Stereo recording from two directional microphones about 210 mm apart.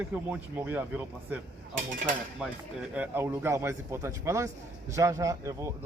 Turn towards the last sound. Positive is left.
turn(degrees=-15)  # may be behind; listen again after turning